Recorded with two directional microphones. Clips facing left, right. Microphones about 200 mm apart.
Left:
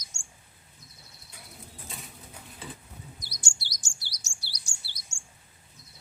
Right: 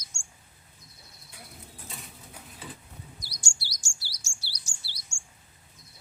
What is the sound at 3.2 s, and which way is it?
Chirp, 20° left (ahead or behind).